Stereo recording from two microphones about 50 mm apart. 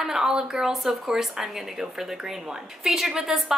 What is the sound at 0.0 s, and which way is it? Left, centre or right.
A woman's voice, centre.